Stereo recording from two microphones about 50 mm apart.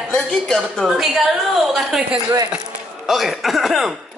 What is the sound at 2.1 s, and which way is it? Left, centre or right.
Speech, right.